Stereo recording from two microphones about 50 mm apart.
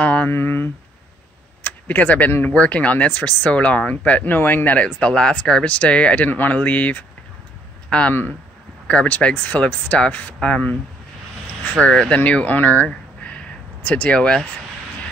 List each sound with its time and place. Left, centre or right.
0.0 s a sound: left
0.3 s speech: left
1.6 s tick-tock: left
2.4 s speech: left
5.0 s speech: centre
11.8 s speech: centre
13.8 s speech: left
14.1 s speech: centre